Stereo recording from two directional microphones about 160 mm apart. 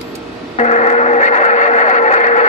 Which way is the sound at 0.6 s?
45° left (ahead or behind).